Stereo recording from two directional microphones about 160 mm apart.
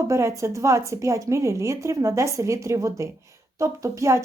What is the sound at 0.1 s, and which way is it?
Speech, 15° right (ahead or behind).